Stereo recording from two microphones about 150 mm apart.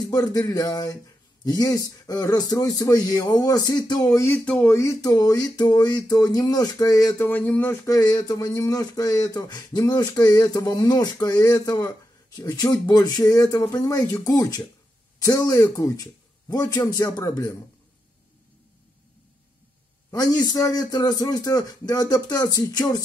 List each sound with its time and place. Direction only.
0.0 s speech: 25° left (ahead or behind)
4.5 s speech: 5° left (ahead or behind)
4.7 s speech: 25° left (ahead or behind)
7.2 s speech: 10° left (ahead or behind)
20.1 s speech: 25° left (ahead or behind)